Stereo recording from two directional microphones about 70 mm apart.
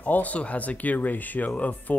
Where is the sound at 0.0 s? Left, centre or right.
Left.